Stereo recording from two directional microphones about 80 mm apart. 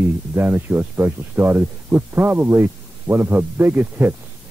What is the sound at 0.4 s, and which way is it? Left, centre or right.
Speech, right.